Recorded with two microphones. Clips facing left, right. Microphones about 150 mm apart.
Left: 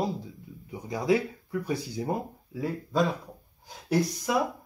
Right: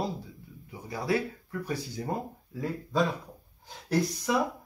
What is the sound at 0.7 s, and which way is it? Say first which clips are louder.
Speech: left 4 dB; 15° left (ahead or behind).